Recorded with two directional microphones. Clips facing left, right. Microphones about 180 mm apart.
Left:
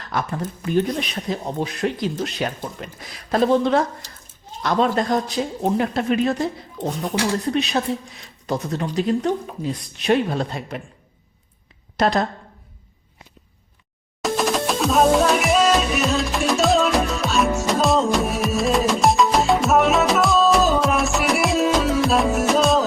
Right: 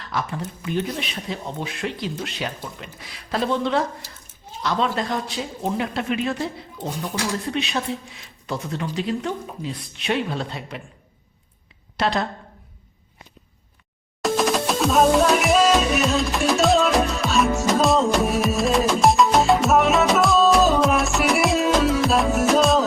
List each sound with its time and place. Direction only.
0.0 s speech: 50° left (ahead or behind)
7.5 s speech: 40° left (ahead or behind)
11.9 s speech: 40° left (ahead or behind)
14.2 s music: centre (ahead or behind)